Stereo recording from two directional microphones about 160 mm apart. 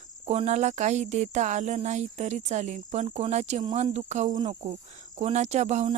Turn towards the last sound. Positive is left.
turn(degrees=-45)  # may be behind; listen again after turning